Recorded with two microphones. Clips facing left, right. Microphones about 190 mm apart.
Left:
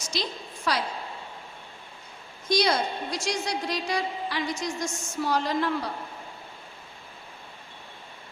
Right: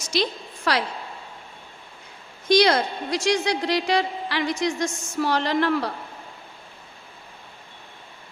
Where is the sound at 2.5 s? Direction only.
85° right.